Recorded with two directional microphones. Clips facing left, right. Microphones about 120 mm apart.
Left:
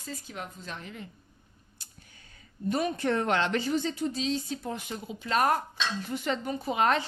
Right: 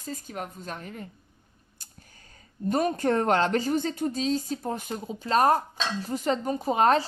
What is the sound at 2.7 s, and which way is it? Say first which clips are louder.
Speech: right 3 dB; 45° right (ahead or behind).